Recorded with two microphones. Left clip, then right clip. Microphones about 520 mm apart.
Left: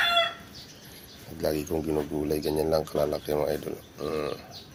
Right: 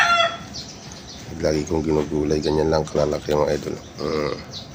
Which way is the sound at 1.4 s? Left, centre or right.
Left.